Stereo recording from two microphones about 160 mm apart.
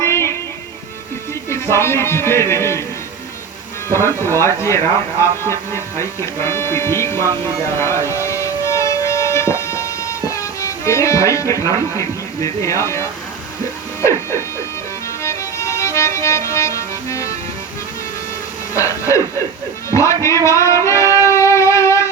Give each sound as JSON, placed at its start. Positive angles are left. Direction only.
{"t": 0.0, "sound": "music", "side_deg": 15}
{"t": 1.5, "sound": "speech", "side_deg": 15}
{"t": 3.9, "sound": "speech", "side_deg": 15}
{"t": 7.8, "sound": "music", "side_deg": 15}
{"t": 11.6, "sound": "speech", "side_deg": 20}
{"t": 14.0, "sound": "a sound", "side_deg": 15}
{"t": 15.2, "sound": "music", "side_deg": 15}
{"t": 18.8, "sound": "music", "side_deg": 20}
{"t": 19.9, "sound": "speech", "side_deg": 20}
{"t": 21.2, "sound": "music", "side_deg": 20}